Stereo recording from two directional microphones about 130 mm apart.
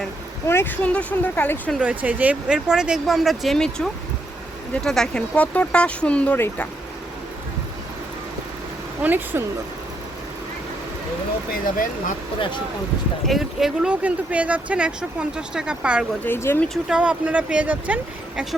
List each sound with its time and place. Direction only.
0.4 s speech: 15° left (ahead or behind)
1.8 s speech: 10° right (ahead or behind); by 6.7 s 10° left (ahead or behind)
9.0 s speech: 15° right (ahead or behind)
13.2 s speech: centre (ahead or behind)
16.2 s speech: 15° left (ahead or behind)
16.6 s speech: 5° right (ahead or behind)